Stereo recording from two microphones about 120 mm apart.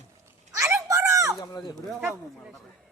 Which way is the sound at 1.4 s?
30° left (ahead or behind).